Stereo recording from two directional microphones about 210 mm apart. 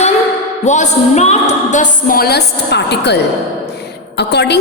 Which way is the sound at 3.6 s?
50° left (ahead or behind).